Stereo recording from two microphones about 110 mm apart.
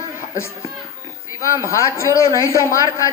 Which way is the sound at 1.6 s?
25° left (ahead or behind).